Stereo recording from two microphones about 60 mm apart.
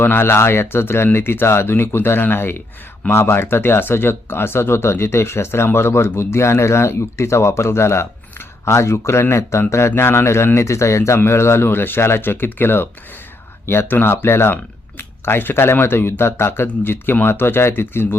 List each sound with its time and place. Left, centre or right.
0.0 s speech: left